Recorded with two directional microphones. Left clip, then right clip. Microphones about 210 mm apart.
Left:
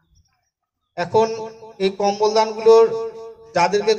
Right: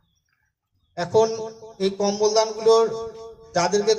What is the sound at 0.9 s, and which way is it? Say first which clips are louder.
Speech: left 2 dB; 40° left (ahead or behind).